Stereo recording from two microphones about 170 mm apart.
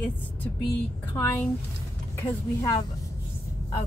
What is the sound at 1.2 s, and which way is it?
Speech, 15° left (ahead or behind).